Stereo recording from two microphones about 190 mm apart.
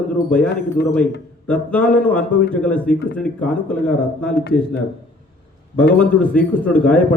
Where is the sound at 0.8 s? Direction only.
60° left (ahead or behind).